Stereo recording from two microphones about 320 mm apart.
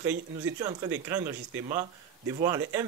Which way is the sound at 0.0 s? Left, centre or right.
Centre.